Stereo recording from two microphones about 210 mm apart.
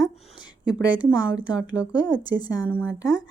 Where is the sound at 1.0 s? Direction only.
5° right (ahead or behind).